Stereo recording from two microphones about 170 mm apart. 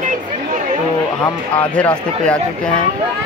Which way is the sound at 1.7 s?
5° left (ahead or behind).